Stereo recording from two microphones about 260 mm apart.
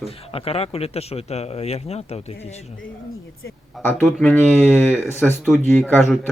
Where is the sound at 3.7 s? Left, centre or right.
Centre.